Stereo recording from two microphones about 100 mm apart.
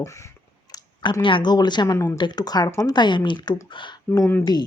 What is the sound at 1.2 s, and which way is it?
Speech, 55° left (ahead or behind).